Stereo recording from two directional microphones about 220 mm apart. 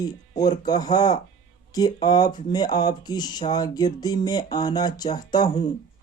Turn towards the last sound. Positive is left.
turn(degrees=15)  # may be behind; listen again after turning